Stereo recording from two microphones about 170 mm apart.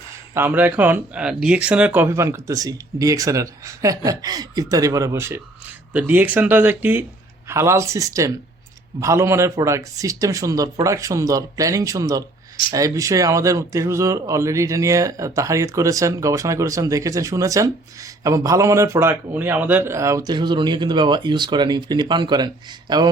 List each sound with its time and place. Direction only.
0.3 s speech: 10° right (ahead or behind); by 22.4 s 25° right (ahead or behind)